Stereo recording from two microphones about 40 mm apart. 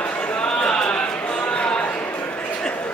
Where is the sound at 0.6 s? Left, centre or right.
Left.